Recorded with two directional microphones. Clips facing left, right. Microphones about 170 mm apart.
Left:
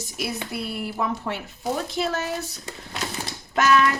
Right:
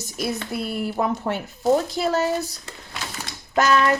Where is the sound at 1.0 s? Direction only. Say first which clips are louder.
Right 3 dB; 45° right (ahead or behind).